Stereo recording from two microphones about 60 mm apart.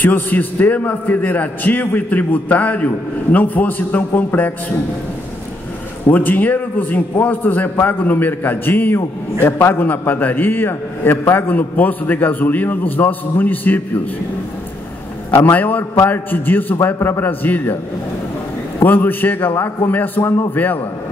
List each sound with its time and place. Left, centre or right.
0.0 s a man's voice: left
6.0 s a man's voice: left
15.5 s a man's voice: left
18.8 s a man's voice: left